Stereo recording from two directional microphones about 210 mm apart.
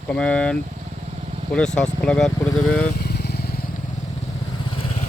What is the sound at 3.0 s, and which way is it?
Motorcycle, 50° left (ahead or behind).